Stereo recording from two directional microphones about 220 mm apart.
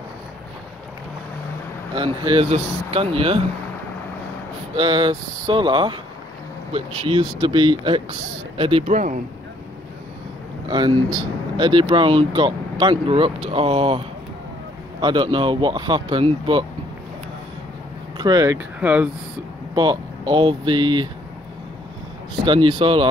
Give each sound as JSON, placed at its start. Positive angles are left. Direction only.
{"t": 2.0, "sound": "speech", "side_deg": -25}
{"t": 4.7, "sound": "speech", "side_deg": -25}
{"t": 10.7, "sound": "speech", "side_deg": -20}
{"t": 18.1, "sound": "speech", "side_deg": -20}
{"t": 19.7, "sound": "speech", "side_deg": -20}
{"t": 22.4, "sound": "speech", "side_deg": -20}